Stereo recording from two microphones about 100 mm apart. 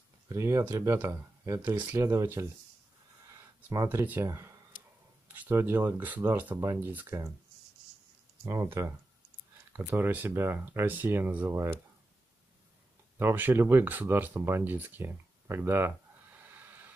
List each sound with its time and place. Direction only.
0.3 s speech: 30° right (ahead or behind)
3.7 s speech: 35° right (ahead or behind)
4.0 s speech: 20° right (ahead or behind)
4.3 s speech: 30° right (ahead or behind)
5.3 s speech: 20° right (ahead or behind)
8.5 s speech: 30° right (ahead or behind)
9.7 s speech: 15° right (ahead or behind)
13.2 s speech: 20° right (ahead or behind)